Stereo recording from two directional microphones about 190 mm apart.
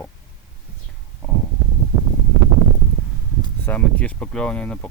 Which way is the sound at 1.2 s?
10° left (ahead or behind).